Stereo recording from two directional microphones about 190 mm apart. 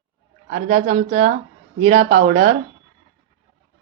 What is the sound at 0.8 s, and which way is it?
Speech, 35° right (ahead or behind).